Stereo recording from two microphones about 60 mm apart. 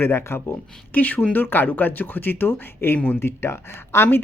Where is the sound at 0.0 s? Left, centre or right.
Left.